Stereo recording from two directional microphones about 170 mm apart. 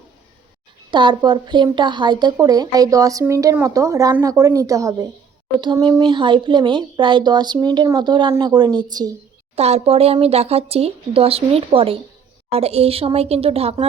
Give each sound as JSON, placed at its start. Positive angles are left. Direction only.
{"t": 0.9, "sound": "a woman's voice", "side_deg": -25}
{"t": 9.6, "sound": "speech", "side_deg": -40}